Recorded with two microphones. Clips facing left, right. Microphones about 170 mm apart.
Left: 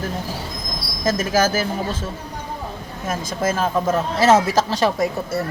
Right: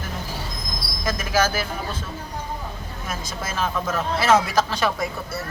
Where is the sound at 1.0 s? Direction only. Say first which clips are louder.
Left 4 dB; 45° left (ahead or behind).